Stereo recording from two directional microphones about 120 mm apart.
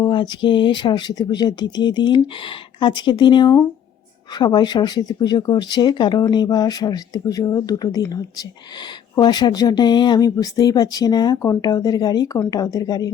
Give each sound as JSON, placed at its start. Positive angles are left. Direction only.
{"t": 0.0, "sound": "speech", "side_deg": 40}